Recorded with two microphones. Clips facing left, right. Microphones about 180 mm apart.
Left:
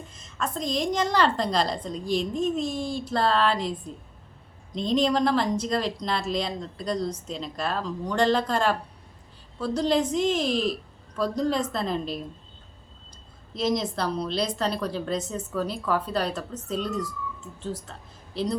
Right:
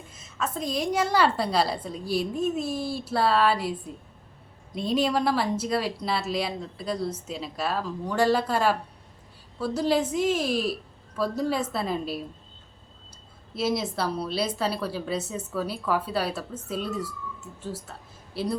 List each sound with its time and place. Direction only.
0.1 s speech: 5° right (ahead or behind)
13.5 s speech: 5° right (ahead or behind)